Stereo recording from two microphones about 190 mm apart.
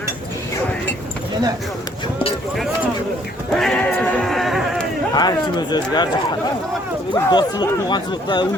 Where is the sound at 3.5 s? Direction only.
5° left (ahead or behind).